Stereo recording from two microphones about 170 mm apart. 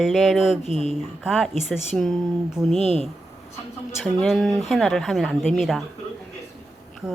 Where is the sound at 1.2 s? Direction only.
Centre (ahead or behind).